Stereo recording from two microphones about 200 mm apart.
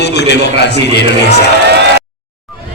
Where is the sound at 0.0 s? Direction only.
60° left (ahead or behind).